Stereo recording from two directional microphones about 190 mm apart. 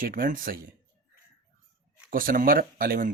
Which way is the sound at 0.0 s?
45° right (ahead or behind).